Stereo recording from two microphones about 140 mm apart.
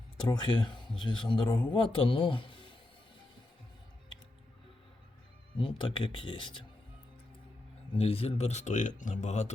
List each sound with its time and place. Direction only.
0.3 s a man's voice: 30° left (ahead or behind)
5.5 s a man's voice: 35° left (ahead or behind)
7.9 s speech: 45° left (ahead or behind)